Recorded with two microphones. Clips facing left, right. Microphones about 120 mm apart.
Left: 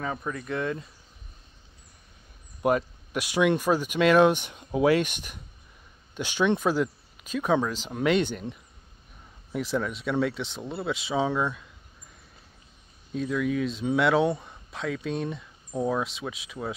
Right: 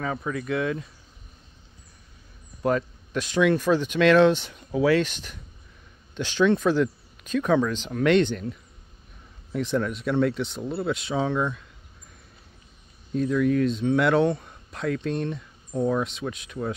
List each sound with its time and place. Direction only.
0.0 s speech: centre (ahead or behind)
2.6 s speech: 10° left (ahead or behind)
9.5 s speech: 5° left (ahead or behind)
13.1 s speech: centre (ahead or behind)